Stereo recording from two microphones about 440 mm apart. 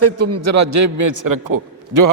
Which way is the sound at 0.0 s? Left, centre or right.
Right.